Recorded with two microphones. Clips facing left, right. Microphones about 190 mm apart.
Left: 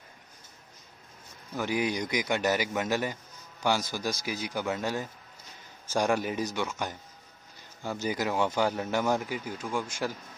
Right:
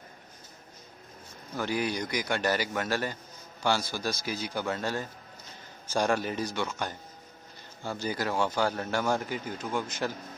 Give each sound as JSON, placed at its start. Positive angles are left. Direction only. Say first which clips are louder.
{"t": 1.6, "sound": "a man's voice", "louder": "left 1 dB", "side_deg": 15}
{"t": 7.8, "sound": "a man's voice", "louder": "left 1 dB", "side_deg": 15}